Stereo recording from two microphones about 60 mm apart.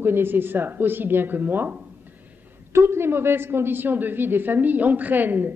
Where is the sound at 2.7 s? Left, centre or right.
Right.